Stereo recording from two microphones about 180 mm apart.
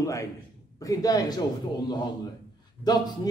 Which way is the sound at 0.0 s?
15° left (ahead or behind).